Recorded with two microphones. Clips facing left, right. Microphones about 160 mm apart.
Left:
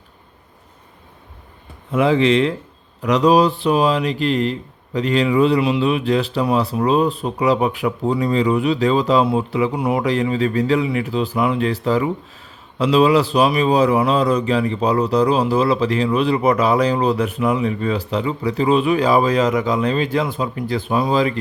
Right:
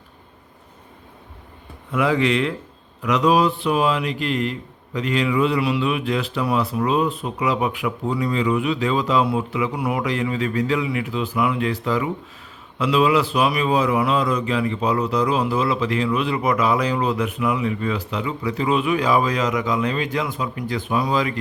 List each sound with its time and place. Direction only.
1.9 s a man's voice: 25° left (ahead or behind)